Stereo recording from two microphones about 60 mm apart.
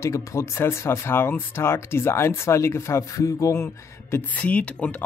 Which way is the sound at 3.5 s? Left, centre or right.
Left.